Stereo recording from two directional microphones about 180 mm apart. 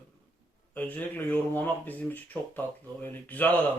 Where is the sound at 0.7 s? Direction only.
10° left (ahead or behind).